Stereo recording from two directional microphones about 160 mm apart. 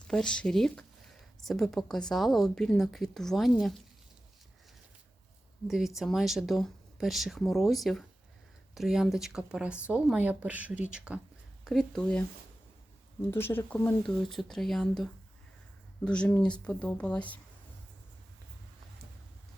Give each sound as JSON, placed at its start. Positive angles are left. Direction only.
{"t": 0.1, "sound": "a woman's voice", "side_deg": 5}
{"t": 5.6, "sound": "a woman's voice", "side_deg": 0}
{"t": 13.3, "sound": "speech", "side_deg": 15}
{"t": 14.3, "sound": "a woman's voice", "side_deg": 0}